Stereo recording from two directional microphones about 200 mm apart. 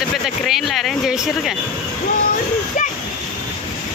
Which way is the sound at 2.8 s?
40° left (ahead or behind).